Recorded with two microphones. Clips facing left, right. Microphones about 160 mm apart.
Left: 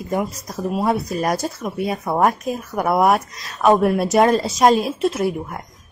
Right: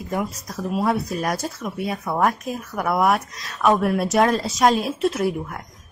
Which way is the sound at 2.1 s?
30° left (ahead or behind).